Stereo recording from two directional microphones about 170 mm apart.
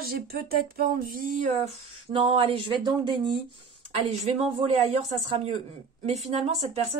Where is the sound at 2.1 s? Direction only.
30° right (ahead or behind).